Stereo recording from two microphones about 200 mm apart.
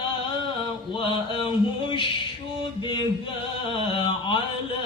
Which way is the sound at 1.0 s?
25° left (ahead or behind).